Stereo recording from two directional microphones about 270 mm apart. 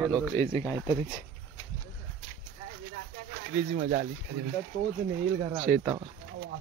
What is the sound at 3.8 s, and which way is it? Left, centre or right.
Speech, right.